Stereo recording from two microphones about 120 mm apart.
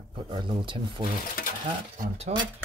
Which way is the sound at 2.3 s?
60° right (ahead or behind).